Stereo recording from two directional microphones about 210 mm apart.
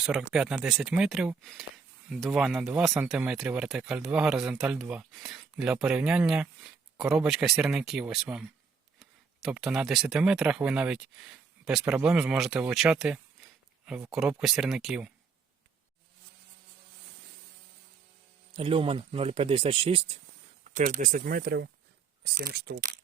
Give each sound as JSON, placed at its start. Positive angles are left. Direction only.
{"t": 0.0, "sound": "speech", "side_deg": -5}
{"t": 18.5, "sound": "speech", "side_deg": -25}